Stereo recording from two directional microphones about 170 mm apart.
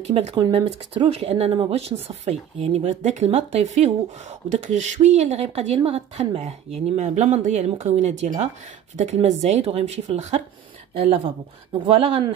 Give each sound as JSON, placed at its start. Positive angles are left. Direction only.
{"t": 0.0, "sound": "a woman's voice", "side_deg": -40}